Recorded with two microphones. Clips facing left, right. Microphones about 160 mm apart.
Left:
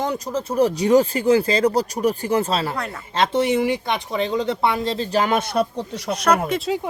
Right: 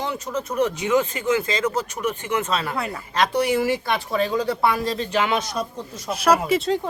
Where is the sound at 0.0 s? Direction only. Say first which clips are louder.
Left 3 dB; 35° left (ahead or behind).